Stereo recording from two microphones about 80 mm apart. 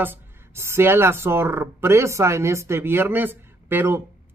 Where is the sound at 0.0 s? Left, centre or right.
Right.